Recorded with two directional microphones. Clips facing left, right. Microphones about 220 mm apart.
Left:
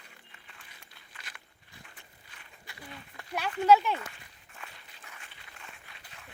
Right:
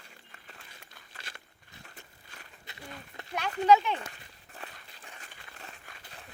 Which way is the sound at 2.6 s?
25° right (ahead or behind).